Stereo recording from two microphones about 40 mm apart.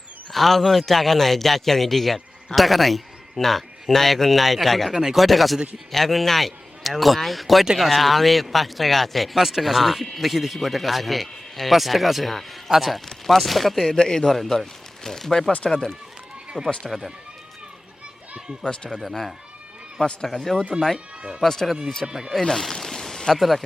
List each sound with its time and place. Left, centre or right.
0.3 s a man's voice: centre
13.9 s speech: centre
18.6 s speech: left
20.2 s speech: centre
21.2 s speech: right
21.4 s speech: centre
22.0 s speech: centre
22.4 s speech: centre
22.8 s a sound: centre